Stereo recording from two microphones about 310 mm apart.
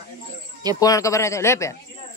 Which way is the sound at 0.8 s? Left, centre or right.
Centre.